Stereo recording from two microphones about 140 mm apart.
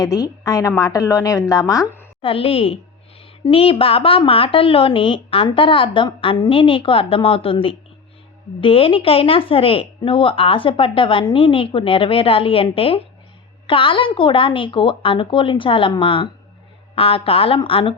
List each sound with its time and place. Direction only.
0.0 s a woman's voice: 25° left (ahead or behind)
2.2 s a woman's voice: 40° left (ahead or behind)